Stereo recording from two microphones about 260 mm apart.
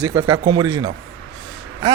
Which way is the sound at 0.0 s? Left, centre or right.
Centre.